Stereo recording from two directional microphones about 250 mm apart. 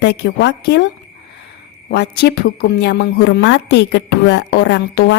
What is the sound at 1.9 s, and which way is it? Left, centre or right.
A woman's voice, left.